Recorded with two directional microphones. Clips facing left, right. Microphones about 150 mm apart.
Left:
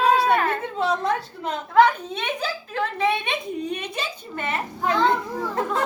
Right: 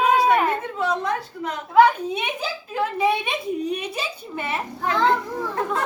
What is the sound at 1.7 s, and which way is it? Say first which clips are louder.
A woman's voice: right 2 dB; 10° right (ahead or behind).